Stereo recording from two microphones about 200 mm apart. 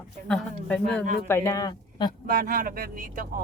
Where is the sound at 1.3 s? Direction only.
15° left (ahead or behind).